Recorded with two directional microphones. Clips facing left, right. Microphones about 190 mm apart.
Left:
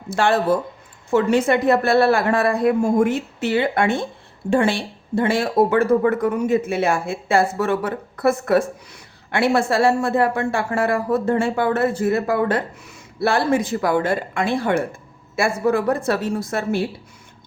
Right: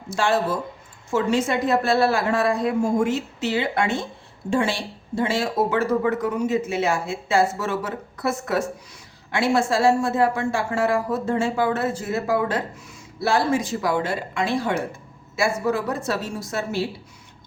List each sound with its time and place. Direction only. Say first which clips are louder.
0.1 s speech: left 4 dB; 60° left (ahead or behind)